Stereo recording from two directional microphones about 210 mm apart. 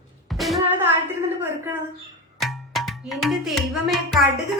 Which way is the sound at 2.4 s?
Centre (ahead or behind).